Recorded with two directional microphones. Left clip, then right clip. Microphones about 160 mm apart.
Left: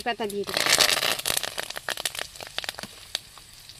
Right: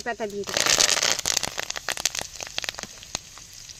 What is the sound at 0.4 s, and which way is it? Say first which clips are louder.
Speech: even; 30° right (ahead or behind).